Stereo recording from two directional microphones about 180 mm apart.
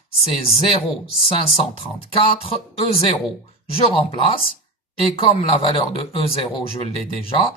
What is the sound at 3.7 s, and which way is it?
Speech, 30° left (ahead or behind).